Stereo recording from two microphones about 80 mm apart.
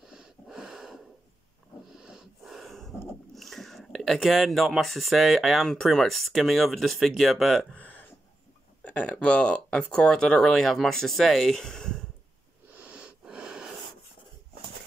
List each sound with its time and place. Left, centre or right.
0.1 s wheeze: centre
2.0 s snort: centre
3.3 s speech: centre
7.7 s a sound: centre
8.8 s speech: centre
12.7 s sniff: centre